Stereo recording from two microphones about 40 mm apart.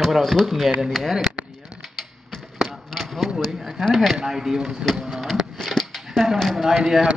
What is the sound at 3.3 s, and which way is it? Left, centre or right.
Speech, centre.